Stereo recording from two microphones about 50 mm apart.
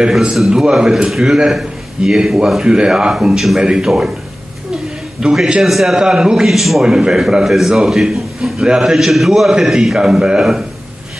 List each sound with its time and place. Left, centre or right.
0.4 s a man's voice: centre
3.3 s a man's voice: centre
5.2 s a man's voice: centre
5.6 s a man's voice: centre
6.0 s a man's voice: centre
9.9 s a man's voice: centre